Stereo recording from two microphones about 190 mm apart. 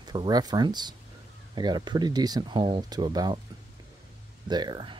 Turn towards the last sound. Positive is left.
turn(degrees=-25)  # may be behind; listen again after turning